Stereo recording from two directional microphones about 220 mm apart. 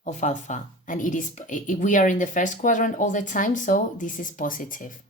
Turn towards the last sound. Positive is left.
turn(degrees=35)  # may be behind; listen again after turning